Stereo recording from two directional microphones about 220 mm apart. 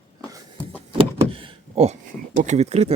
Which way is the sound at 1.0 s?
25° right (ahead or behind).